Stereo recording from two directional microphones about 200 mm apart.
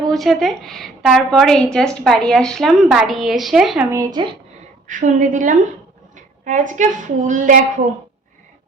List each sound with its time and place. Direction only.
0.0 s a woman's voice: centre (ahead or behind)
3.9 s speech: 20° right (ahead or behind)
4.9 s a woman's voice: 40° right (ahead or behind)